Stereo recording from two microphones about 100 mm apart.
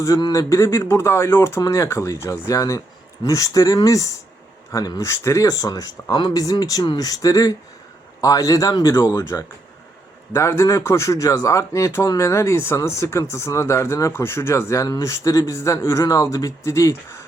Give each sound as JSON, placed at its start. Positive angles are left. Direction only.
{"t": 0.2, "sound": "speech", "side_deg": 35}